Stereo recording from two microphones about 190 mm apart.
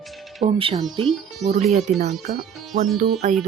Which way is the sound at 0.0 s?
Centre (ahead or behind).